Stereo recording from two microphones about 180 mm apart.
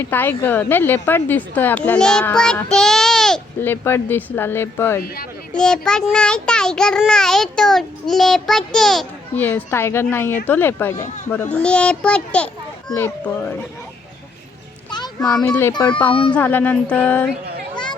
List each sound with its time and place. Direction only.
0.0 s a woman's voice: 10° left (ahead or behind)
14.8 s music: 25° left (ahead or behind)
15.4 s a woman's voice: 10° left (ahead or behind)